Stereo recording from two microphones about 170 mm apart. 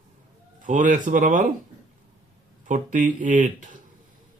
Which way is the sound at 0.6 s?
50° right (ahead or behind).